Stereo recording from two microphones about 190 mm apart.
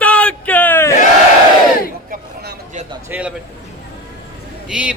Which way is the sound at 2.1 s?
60° right (ahead or behind).